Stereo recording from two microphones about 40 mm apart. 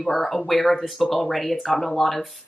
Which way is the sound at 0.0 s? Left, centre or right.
Centre.